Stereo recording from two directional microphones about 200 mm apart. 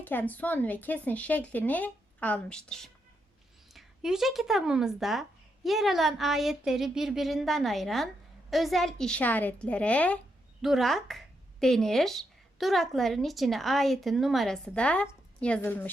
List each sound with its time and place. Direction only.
0.0 s a woman's voice: 10° left (ahead or behind)